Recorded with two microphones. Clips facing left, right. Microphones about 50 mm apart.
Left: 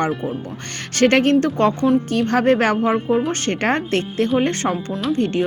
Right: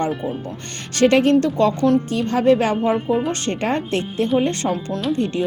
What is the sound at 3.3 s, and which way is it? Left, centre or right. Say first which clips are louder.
A woman's voice: left 2 dB; left.